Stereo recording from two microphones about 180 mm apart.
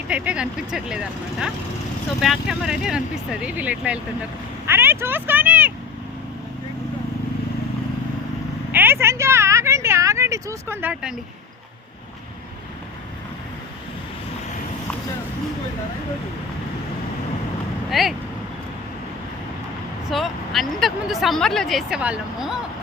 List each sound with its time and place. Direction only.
0.1 s speech: 5° right (ahead or behind)
8.7 s vehicle: 10° right (ahead or behind)
17.9 s speech: centre (ahead or behind)
20.1 s speech: centre (ahead or behind)